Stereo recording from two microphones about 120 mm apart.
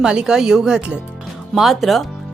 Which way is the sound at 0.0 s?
5° right (ahead or behind).